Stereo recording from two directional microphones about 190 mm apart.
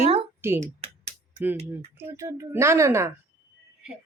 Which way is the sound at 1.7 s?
10° right (ahead or behind).